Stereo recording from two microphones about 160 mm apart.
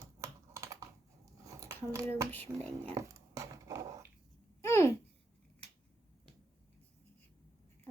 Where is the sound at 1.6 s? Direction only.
15° right (ahead or behind).